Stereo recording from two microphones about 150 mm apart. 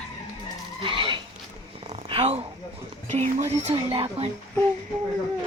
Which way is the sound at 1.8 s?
45° right (ahead or behind).